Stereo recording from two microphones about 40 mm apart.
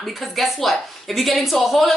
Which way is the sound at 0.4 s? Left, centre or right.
Centre.